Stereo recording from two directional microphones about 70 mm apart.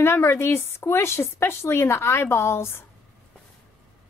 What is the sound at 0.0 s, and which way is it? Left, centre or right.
Speech, left.